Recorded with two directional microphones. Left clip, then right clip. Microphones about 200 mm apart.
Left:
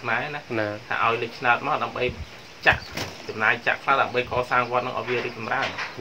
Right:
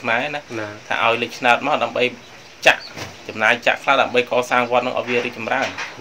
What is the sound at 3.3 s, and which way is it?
Speech, 50° right (ahead or behind).